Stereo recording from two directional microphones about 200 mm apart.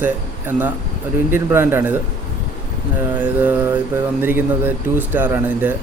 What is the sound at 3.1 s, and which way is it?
A man's voice, 10° right (ahead or behind).